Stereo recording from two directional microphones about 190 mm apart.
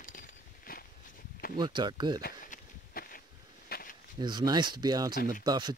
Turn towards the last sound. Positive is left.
turn(degrees=-20)  # may be behind; listen again after turning